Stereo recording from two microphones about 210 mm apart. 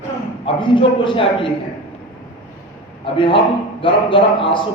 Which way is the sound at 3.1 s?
25° left (ahead or behind).